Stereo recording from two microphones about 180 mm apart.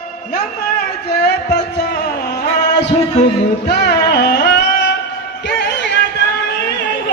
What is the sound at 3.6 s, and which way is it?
Music, 65° left (ahead or behind).